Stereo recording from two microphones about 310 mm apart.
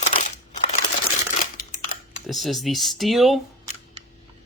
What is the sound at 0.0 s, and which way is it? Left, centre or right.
Crumpling, left.